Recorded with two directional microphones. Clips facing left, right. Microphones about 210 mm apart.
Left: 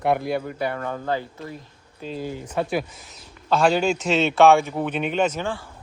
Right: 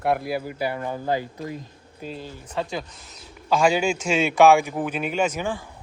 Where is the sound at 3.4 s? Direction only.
10° right (ahead or behind).